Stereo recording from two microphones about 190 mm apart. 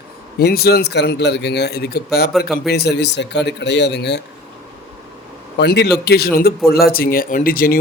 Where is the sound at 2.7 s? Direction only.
60° left (ahead or behind).